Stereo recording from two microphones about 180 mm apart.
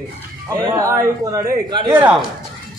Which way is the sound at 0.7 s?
15° right (ahead or behind).